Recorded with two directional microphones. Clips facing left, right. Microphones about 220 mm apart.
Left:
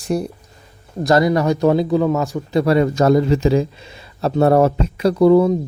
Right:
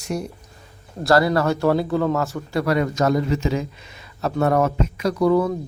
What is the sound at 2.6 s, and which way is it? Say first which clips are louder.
Speech: left 5 dB; 30° left (ahead or behind).